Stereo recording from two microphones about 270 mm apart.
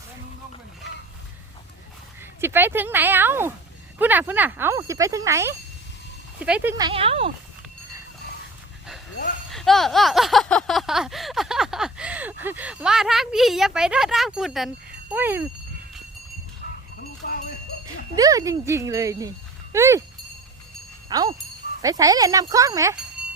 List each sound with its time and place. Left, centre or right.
2.4 s speech: centre
9.5 s speech: centre
16.6 s a sound: left
18.2 s speech: centre
21.1 s speech: centre